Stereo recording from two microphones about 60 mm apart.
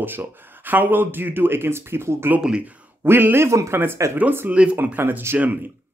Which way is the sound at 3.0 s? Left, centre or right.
Right.